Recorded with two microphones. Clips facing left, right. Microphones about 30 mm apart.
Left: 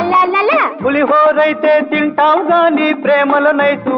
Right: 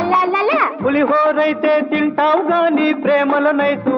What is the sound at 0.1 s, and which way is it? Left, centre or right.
Music, centre.